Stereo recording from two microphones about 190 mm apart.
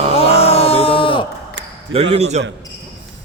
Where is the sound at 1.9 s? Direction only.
30° right (ahead or behind).